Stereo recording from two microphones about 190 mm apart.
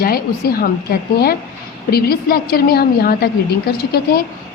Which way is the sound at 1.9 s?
55° left (ahead or behind).